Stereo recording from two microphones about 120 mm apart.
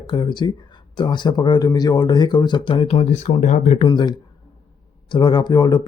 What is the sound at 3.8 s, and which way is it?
Speech, 35° left (ahead or behind).